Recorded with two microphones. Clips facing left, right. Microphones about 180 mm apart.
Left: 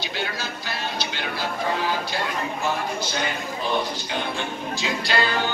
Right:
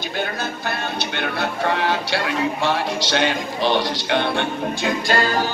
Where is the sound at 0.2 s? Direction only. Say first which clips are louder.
Right 7 dB; 55° right (ahead or behind).